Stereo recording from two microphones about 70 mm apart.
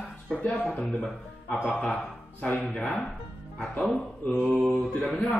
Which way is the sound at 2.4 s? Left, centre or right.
Left.